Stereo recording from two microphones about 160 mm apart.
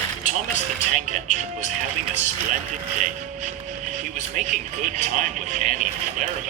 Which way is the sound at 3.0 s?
50° right (ahead or behind).